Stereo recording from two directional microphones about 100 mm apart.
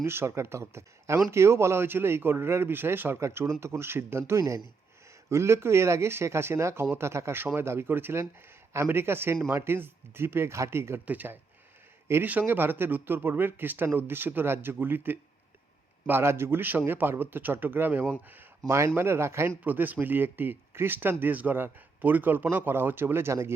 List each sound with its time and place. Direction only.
0.0 s speech: 25° right (ahead or behind)